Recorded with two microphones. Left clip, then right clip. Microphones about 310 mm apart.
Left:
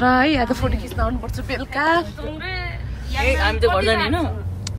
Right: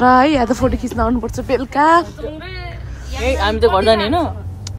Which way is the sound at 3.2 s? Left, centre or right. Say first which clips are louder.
Right 4 dB; right.